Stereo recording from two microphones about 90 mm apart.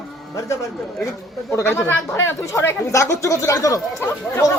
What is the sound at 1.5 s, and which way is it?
A man's voice, 30° left (ahead or behind).